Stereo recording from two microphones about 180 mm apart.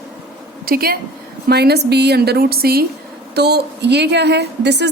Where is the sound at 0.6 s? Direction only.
55° right (ahead or behind).